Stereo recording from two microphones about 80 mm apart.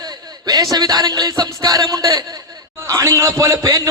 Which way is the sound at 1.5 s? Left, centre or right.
Right.